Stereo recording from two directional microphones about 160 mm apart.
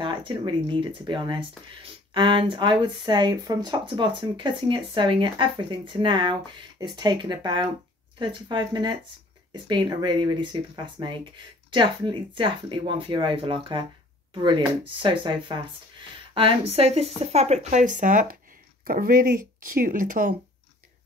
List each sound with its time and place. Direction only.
0.0 s speech: 30° right (ahead or behind)
15.0 s speech: 30° right (ahead or behind); by 20.3 s 60° right (ahead or behind)